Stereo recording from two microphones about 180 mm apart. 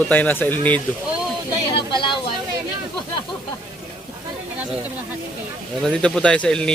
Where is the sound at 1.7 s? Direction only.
25° left (ahead or behind).